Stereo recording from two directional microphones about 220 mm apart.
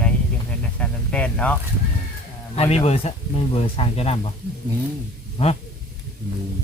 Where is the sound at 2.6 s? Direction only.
25° left (ahead or behind).